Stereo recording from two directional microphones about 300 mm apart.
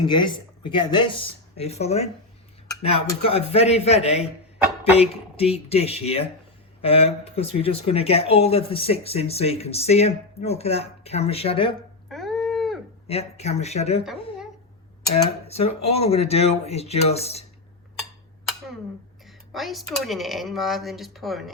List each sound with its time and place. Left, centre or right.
0.1 s speech: centre
12.0 s a sound: centre
13.1 s speech: left
15.1 s speech: left
19.5 s speech: centre